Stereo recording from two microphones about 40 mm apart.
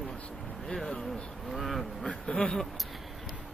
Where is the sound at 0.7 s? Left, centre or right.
Centre.